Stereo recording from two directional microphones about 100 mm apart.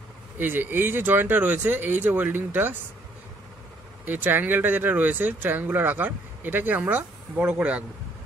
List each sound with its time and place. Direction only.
0.4 s speech: 20° right (ahead or behind)
4.0 s speech: 20° right (ahead or behind)